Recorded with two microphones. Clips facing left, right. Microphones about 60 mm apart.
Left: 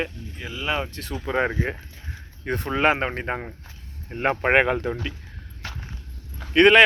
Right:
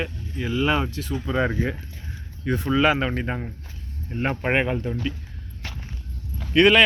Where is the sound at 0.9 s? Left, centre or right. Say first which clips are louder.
Right 4 dB; left.